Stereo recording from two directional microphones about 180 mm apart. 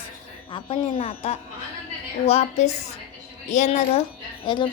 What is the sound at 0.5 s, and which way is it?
A woman's voice, 35° left (ahead or behind).